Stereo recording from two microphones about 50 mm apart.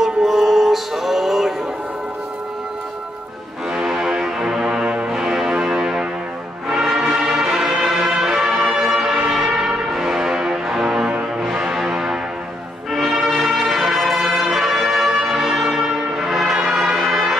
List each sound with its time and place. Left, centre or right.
0.0 s music: centre
3.7 s music: centre
4.8 s brass instrument: right
5.1 s music: centre
15.1 s brass instrument: centre
16.5 s music: centre